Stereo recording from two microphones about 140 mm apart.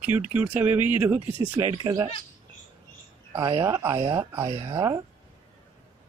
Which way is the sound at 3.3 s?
20° right (ahead or behind).